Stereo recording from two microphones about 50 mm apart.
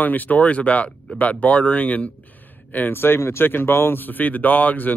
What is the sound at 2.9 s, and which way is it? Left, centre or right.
Speech, left.